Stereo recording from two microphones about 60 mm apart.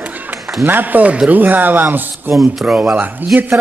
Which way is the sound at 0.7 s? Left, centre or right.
Right.